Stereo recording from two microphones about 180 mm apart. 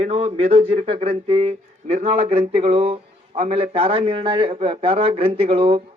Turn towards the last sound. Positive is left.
turn(degrees=-30)  # may be behind; listen again after turning